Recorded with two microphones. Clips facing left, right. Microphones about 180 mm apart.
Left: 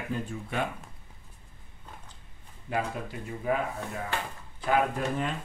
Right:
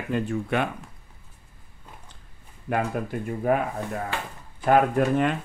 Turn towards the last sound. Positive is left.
turn(degrees=-60)  # may be behind; listen again after turning